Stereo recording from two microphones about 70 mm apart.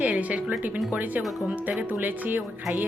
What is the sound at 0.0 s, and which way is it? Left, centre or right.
Speech, right.